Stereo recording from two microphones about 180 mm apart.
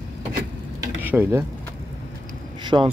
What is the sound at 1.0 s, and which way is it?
Speech, 10° right (ahead or behind).